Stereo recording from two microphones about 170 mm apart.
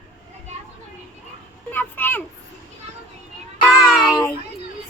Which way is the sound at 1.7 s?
10° left (ahead or behind).